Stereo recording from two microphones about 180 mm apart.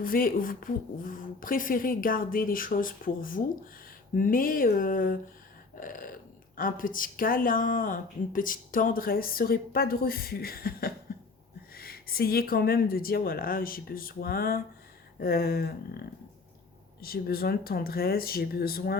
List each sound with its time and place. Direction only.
0.0 s speech: 50° left (ahead or behind)
5.7 s a sound: 50° left (ahead or behind)
6.6 s speech: 50° left (ahead or behind)